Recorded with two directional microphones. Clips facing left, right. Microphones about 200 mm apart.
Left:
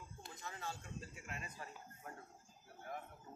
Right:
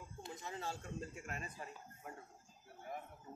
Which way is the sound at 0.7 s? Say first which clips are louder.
Right 2 dB; 45° right (ahead or behind).